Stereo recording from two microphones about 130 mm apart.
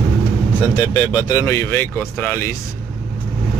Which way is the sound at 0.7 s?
30° left (ahead or behind).